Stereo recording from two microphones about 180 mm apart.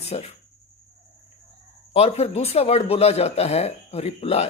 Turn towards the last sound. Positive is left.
turn(degrees=35)  # may be behind; listen again after turning